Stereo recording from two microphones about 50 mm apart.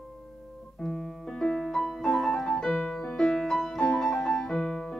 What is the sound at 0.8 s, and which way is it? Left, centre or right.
Music, centre.